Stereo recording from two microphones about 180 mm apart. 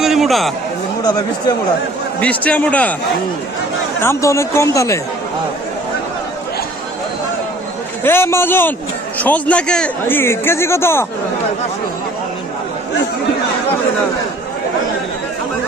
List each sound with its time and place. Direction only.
0.0 s a sound: centre (ahead or behind)
2.2 s speech: 10° left (ahead or behind)
4.0 s speech: 15° left (ahead or behind)
8.0 s speech: 15° left (ahead or behind)